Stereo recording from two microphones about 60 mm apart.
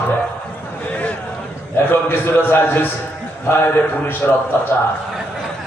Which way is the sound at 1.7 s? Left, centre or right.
Left.